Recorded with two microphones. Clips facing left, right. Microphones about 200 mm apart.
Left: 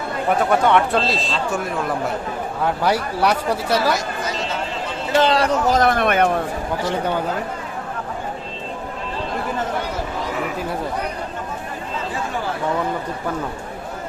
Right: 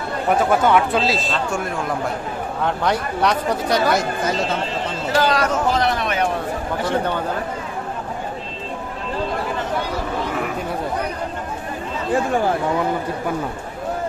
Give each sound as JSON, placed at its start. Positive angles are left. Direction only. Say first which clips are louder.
{"t": 0.4, "sound": "speech", "louder": "even", "side_deg": 0}
{"t": 5.1, "sound": "speech", "louder": "left 2 dB", "side_deg": 25}